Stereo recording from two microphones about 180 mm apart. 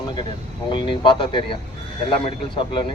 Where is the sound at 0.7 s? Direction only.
25° left (ahead or behind).